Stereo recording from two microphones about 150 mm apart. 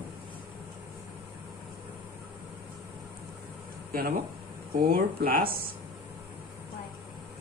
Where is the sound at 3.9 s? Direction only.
75° right (ahead or behind).